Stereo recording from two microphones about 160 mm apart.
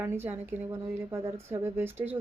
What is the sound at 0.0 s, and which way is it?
A woman's voice, 15° right (ahead or behind).